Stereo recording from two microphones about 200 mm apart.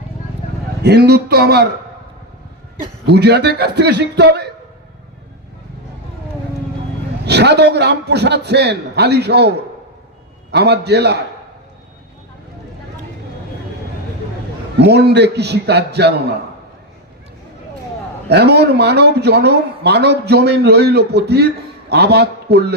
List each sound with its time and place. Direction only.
0.8 s a man's voice: 55° right (ahead or behind)
3.1 s a man's voice: 55° right (ahead or behind)
7.3 s a man's voice: 55° right (ahead or behind)
10.5 s a man's voice: 55° right (ahead or behind)
14.8 s a man's voice: 55° right (ahead or behind)
18.3 s a man's voice: 55° right (ahead or behind)